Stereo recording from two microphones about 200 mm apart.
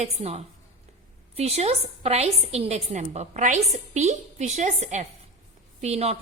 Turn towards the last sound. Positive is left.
turn(degrees=-30)  # may be behind; listen again after turning